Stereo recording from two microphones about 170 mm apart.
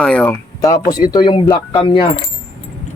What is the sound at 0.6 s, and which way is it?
Speech, 20° left (ahead or behind).